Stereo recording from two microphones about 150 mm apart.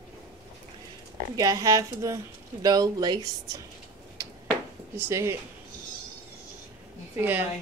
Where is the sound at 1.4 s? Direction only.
25° right (ahead or behind).